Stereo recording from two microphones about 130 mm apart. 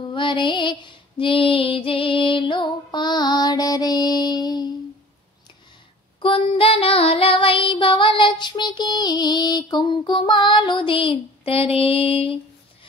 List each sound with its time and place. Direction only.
0.1 s female singing: 40° left (ahead or behind)
6.1 s child singing: 40° left (ahead or behind)